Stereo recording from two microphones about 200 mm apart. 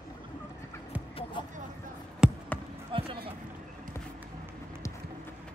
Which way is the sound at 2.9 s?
25° right (ahead or behind).